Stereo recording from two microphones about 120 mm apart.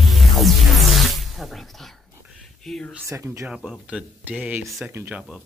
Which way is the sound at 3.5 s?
5° right (ahead or behind).